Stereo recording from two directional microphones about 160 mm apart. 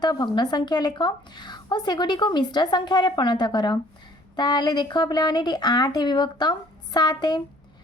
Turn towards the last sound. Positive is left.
turn(degrees=25)  # may be behind; listen again after turning